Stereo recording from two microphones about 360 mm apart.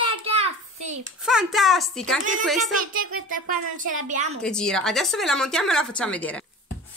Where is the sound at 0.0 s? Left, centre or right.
Centre.